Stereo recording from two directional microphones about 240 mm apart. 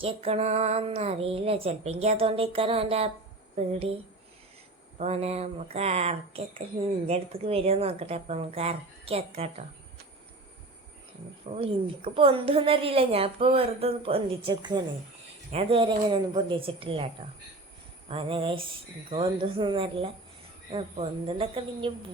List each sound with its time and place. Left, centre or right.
0.0 s a woman's voice: right
4.9 s a woman's voice: right
11.5 s a woman's voice: right